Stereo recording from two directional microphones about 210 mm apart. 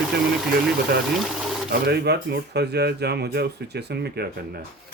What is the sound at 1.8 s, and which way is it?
Speech, 50° right (ahead or behind).